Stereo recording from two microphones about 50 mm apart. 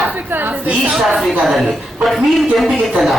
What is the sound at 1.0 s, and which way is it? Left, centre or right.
Speech, centre.